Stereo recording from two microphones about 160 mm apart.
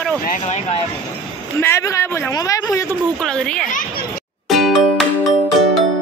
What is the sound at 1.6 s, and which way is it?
A man's voice, 15° left (ahead or behind).